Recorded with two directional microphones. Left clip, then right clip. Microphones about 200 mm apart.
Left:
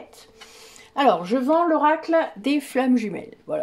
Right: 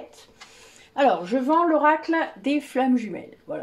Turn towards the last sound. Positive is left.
turn(degrees=45)  # may be behind; listen again after turning